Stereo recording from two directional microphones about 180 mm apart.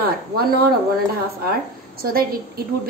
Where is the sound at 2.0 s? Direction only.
55° right (ahead or behind).